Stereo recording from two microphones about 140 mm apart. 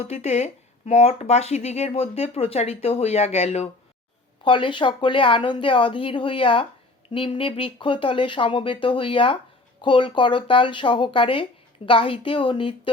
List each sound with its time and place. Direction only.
0.0 s speech: 50° left (ahead or behind)
4.4 s speech: 35° left (ahead or behind)